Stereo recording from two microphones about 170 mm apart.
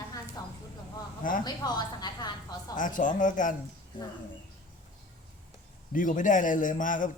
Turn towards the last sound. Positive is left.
turn(degrees=50)  # may be behind; listen again after turning